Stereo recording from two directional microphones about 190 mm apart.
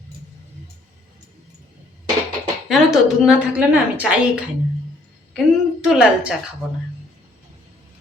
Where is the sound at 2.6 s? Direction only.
Centre (ahead or behind).